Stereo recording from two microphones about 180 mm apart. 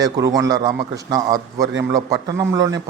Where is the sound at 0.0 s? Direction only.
20° right (ahead or behind).